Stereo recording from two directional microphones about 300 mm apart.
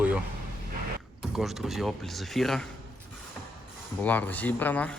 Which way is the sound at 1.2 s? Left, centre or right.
Centre.